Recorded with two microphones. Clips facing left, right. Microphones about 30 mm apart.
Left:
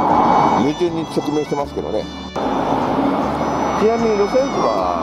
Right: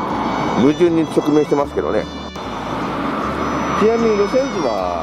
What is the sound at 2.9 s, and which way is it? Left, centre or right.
Vehicle, right.